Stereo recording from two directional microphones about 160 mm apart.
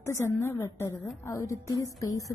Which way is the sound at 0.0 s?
15° left (ahead or behind).